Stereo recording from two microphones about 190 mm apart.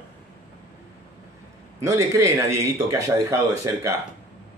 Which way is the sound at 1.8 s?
15° right (ahead or behind).